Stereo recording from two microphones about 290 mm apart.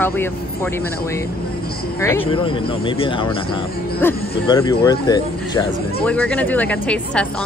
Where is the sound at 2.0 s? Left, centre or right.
Centre.